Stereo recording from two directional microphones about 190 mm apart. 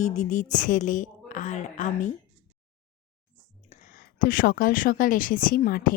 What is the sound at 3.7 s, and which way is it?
Speech, 45° left (ahead or behind).